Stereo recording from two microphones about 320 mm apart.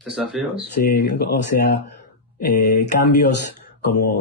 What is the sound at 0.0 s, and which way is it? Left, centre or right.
Speech, centre.